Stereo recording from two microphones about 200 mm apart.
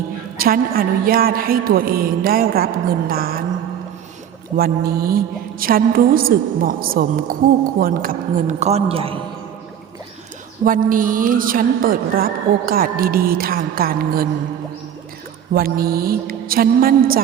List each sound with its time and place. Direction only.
0.3 s a woman's voice: 45° right (ahead or behind)
4.5 s a woman's voice: 50° right (ahead or behind); by 9.1 s 30° right (ahead or behind)
10.6 s a woman's voice: 45° right (ahead or behind)
15.5 s a woman's voice: 50° right (ahead or behind)